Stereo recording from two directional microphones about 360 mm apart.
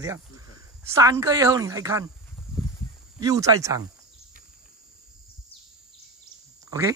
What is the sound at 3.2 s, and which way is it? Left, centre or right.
Speech, centre.